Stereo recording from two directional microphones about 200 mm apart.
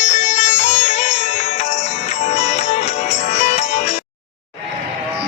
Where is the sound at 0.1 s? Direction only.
35° left (ahead or behind).